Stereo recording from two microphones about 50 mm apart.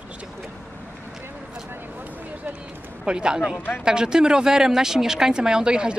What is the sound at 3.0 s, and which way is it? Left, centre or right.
Speech, centre.